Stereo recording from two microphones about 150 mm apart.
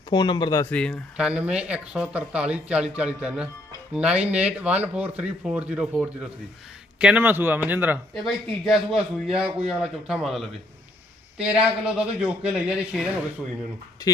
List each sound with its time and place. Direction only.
0.1 s speech: 30° left (ahead or behind)
0.6 s speech: 10° left (ahead or behind)
1.1 s speech: 5° right (ahead or behind)
8.1 s a man's voice: centre (ahead or behind)
14.0 s speech: 25° left (ahead or behind)